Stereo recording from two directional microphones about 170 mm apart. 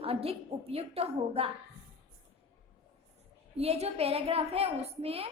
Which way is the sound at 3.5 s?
35° right (ahead or behind).